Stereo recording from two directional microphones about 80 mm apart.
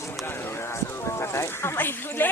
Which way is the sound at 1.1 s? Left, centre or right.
Left.